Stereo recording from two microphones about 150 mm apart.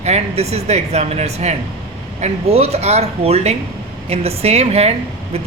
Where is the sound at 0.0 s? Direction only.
45° right (ahead or behind).